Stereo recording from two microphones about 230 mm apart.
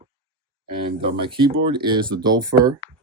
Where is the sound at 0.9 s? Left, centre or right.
Right.